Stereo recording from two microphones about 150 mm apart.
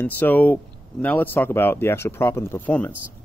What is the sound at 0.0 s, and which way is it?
Speech, 10° left (ahead or behind).